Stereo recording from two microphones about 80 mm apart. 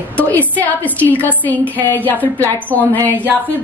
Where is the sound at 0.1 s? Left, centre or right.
Left.